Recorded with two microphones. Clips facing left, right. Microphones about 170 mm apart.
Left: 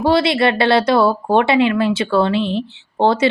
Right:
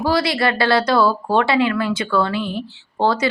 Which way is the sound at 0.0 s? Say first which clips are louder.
Left 4 dB; 25° left (ahead or behind).